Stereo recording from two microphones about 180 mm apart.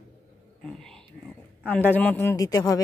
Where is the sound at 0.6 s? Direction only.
5° left (ahead or behind).